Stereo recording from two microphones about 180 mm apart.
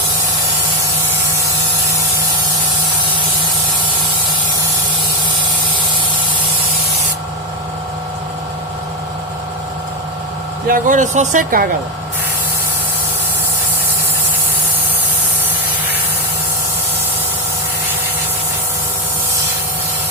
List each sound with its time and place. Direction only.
10.7 s speech: 45° right (ahead or behind)